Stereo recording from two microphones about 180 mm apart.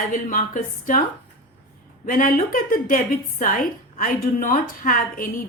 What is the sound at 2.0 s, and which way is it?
A woman's voice, 50° left (ahead or behind).